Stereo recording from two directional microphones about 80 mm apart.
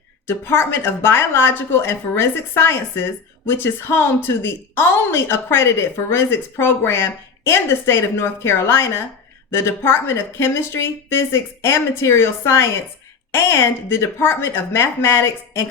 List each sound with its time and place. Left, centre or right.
0.3 s a woman's voice: left